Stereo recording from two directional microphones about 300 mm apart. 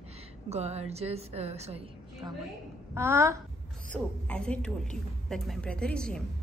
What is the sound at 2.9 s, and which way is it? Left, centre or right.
Speech, centre.